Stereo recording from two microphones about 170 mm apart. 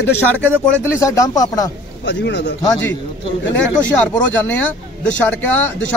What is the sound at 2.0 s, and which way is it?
Speech, 85° left.